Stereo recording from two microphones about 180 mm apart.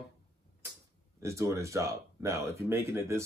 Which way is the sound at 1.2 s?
15° right (ahead or behind).